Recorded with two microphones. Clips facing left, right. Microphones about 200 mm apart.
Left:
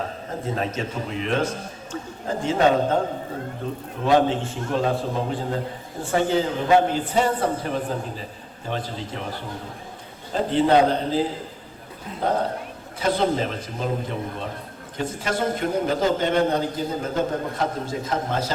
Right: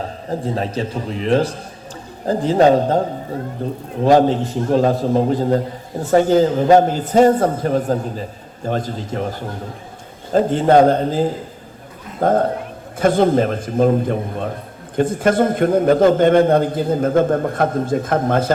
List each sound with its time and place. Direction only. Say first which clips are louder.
0.3 s a man's voice: right 6 dB; 35° right (ahead or behind)
4.0 s a man's voice: right 6 dB; 40° right (ahead or behind)
10.3 s a man's voice: right 6 dB; 45° right (ahead or behind)